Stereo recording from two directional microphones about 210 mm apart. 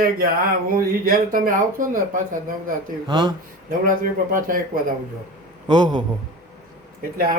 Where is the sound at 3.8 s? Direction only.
40° right (ahead or behind).